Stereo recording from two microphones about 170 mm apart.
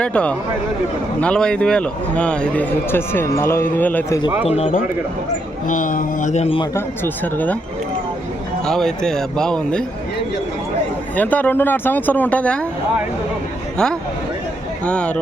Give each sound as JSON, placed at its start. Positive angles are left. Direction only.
{"t": 0.0, "sound": "a man's voice", "side_deg": 5}
{"t": 4.4, "sound": "speech", "side_deg": 40}
{"t": 5.6, "sound": "speech", "side_deg": 50}
{"t": 6.7, "sound": "a man's voice", "side_deg": 10}
{"t": 8.6, "sound": "speech", "side_deg": 5}
{"t": 11.2, "sound": "a man's voice", "side_deg": 10}
{"t": 14.8, "sound": "a man's voice", "side_deg": 5}